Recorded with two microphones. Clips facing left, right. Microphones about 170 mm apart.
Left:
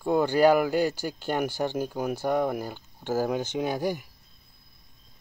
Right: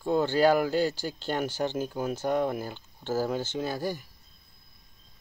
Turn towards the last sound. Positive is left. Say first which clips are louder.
# left 3 dB
turn(degrees=15)  # may be behind; listen again after turning